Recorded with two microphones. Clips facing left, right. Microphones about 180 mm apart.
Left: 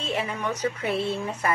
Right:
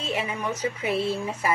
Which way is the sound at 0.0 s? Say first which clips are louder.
Even; centre (ahead or behind).